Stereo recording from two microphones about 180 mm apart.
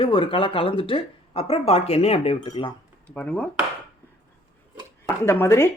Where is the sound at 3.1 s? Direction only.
5° left (ahead or behind).